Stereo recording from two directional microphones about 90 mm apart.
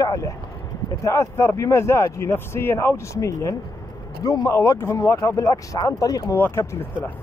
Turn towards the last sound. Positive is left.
turn(degrees=25)  # may be behind; listen again after turning